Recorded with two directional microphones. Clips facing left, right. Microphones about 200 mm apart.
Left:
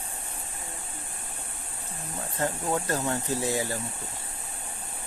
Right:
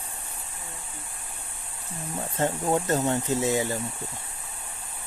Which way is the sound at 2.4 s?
20° right (ahead or behind).